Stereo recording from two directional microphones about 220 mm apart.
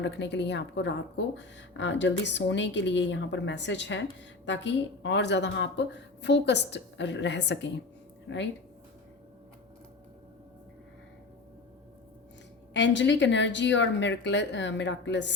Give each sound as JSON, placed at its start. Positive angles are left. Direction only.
{"t": 0.0, "sound": "a woman's voice", "side_deg": 50}
{"t": 12.7, "sound": "speech", "side_deg": 55}